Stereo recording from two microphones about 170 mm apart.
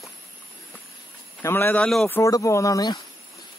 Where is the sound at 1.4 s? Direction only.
15° left (ahead or behind).